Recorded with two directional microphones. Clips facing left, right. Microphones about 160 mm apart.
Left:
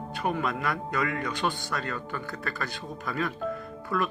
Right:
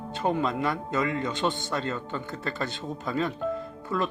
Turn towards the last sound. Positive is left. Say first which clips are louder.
# right 1 dB
turn(degrees=-25)  # may be behind; listen again after turning